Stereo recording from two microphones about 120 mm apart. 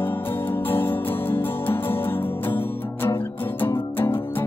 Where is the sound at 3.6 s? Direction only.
20° left (ahead or behind).